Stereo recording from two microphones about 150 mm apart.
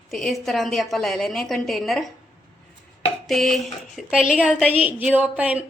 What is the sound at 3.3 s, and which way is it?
A woman's voice, centre (ahead or behind).